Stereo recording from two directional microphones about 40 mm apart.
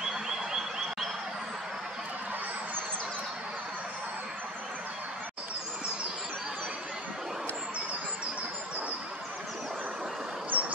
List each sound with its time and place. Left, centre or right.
10.5 s bird: right